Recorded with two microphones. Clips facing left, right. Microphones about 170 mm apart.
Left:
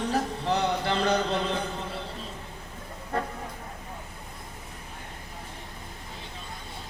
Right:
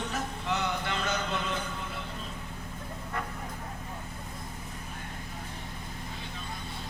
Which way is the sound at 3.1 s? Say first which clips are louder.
Left 7 dB; 35° left (ahead or behind).